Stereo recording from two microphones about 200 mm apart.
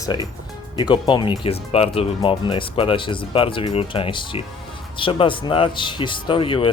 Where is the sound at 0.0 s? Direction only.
20° left (ahead or behind).